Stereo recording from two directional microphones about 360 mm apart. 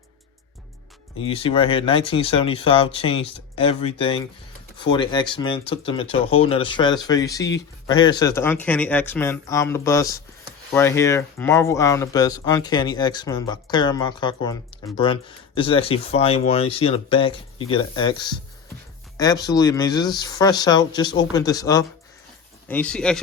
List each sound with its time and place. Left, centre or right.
1.2 s speech: centre